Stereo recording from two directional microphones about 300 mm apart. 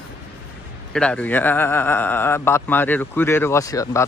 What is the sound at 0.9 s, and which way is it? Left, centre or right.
Speech, centre.